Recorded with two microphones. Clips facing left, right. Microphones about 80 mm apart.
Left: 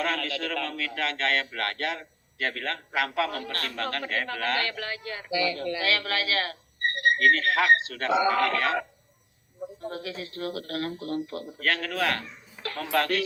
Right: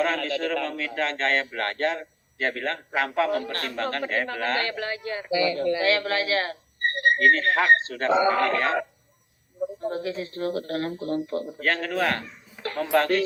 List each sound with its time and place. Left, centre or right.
0.0 s a man's voice: right
9.8 s a man's voice: right